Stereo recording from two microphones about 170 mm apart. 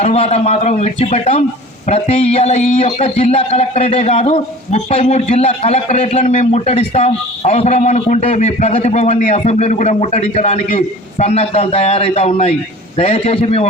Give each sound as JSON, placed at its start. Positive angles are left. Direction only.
{"t": 0.0, "sound": "a man's voice", "side_deg": 40}